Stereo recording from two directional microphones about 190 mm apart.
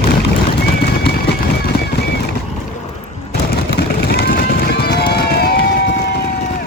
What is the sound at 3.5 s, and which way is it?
Run, 55° left (ahead or behind).